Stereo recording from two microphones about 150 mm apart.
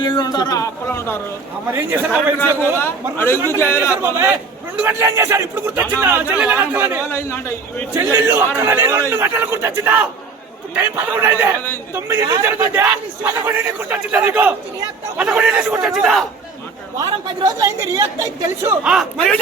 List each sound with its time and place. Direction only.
0.0 s a man's voice: 30° left (ahead or behind)
1.7 s a man's voice: 15° right (ahead or behind)
2.7 s a man's voice: 15° left (ahead or behind)
4.0 s a man's voice: 15° right (ahead or behind)
7.1 s a man's voice: 15° left (ahead or behind)
7.9 s a man's voice: 15° right (ahead or behind); by 16.2 s centre (ahead or behind)
17.0 s speech: 20° right (ahead or behind)
18.8 s a man's voice: 5° right (ahead or behind)